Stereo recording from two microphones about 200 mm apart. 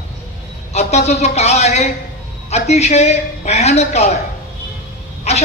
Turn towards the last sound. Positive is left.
turn(degrees=35)  # may be behind; listen again after turning